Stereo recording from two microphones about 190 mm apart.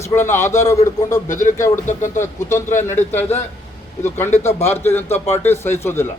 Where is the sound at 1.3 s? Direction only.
40° left (ahead or behind).